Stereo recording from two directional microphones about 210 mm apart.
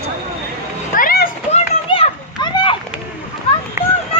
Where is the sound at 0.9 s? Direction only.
45° left (ahead or behind).